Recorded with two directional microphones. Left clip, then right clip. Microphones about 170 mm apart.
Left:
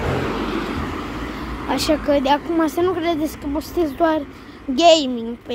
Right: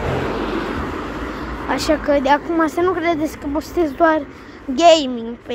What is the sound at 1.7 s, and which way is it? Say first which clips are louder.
Speech: right 1 dB; 15° left (ahead or behind).